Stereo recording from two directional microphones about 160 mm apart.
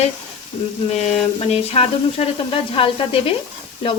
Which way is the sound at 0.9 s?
45° left (ahead or behind).